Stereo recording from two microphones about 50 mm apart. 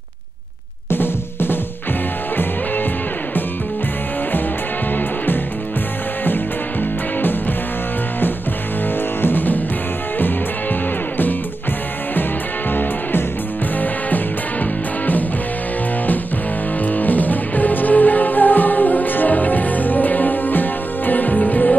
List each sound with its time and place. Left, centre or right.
0.8 s drum: left
4.9 s music: left
9.2 s music: left
16.8 s music: left